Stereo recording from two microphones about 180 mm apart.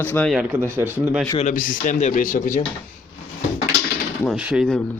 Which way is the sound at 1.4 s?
45° left (ahead or behind).